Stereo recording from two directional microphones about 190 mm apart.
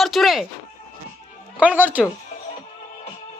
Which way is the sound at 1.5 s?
5° right (ahead or behind).